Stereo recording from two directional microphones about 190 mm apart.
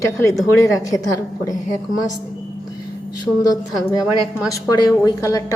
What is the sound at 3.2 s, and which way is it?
Speech, 20° left (ahead or behind).